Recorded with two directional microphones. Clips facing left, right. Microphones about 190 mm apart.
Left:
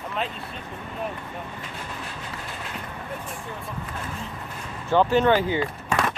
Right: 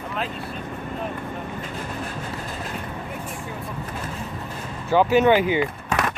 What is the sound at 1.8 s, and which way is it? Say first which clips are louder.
Train: right 5 dB; 45° right (ahead or behind).